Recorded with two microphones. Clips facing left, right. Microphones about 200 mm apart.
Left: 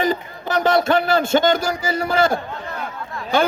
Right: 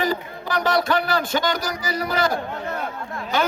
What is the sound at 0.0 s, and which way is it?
A man's voice, 25° left (ahead or behind).